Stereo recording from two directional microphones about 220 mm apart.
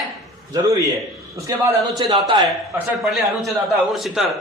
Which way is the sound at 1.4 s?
15° right (ahead or behind).